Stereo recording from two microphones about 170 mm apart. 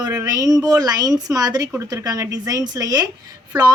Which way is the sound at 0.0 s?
20° right (ahead or behind).